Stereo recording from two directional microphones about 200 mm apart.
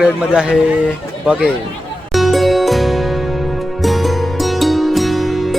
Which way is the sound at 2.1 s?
Centre (ahead or behind).